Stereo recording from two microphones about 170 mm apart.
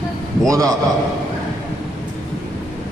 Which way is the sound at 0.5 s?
20° right (ahead or behind).